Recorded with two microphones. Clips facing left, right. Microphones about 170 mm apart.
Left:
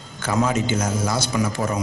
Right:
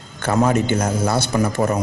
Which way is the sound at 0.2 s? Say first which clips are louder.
Right 4 dB; 55° right (ahead or behind).